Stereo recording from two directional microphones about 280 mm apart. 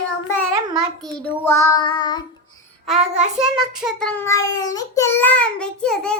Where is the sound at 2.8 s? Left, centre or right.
Centre.